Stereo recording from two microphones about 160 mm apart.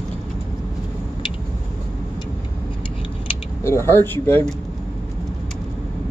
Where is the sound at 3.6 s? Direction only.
15° left (ahead or behind).